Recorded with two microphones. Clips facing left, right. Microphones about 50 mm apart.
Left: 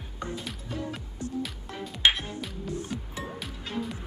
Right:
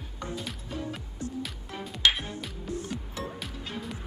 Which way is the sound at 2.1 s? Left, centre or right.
Centre.